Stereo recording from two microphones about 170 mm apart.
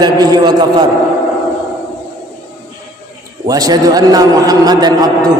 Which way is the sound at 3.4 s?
20° right (ahead or behind).